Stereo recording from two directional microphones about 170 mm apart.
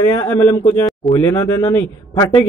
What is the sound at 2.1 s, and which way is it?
Speech, 25° left (ahead or behind).